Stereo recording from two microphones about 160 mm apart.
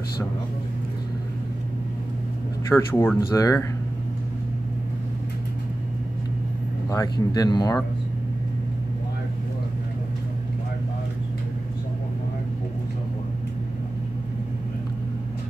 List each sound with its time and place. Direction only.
2.7 s speech: 15° left (ahead or behind)
6.9 s speech: 20° left (ahead or behind)